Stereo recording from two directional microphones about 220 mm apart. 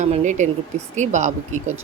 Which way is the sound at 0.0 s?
35° right (ahead or behind).